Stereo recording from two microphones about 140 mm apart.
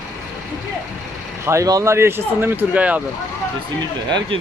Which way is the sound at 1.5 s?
25° right (ahead or behind).